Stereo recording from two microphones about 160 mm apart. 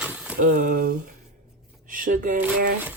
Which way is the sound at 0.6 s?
65° right (ahead or behind).